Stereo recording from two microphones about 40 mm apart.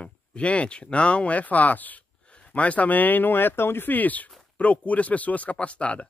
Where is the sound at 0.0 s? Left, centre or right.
Left.